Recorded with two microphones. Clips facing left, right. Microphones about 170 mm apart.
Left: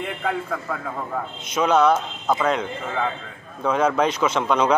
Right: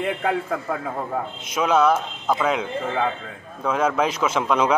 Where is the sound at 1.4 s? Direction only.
5° right (ahead or behind).